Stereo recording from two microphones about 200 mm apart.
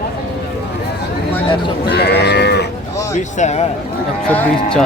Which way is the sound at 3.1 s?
35° left (ahead or behind).